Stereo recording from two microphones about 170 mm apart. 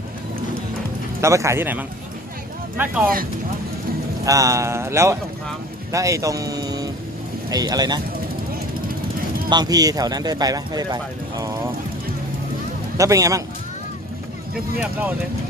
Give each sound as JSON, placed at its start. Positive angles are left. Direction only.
{"t": 1.2, "sound": "speech", "side_deg": -15}
{"t": 4.3, "sound": "speech", "side_deg": -20}
{"t": 9.5, "sound": "speech", "side_deg": -25}
{"t": 13.0, "sound": "speech", "side_deg": -20}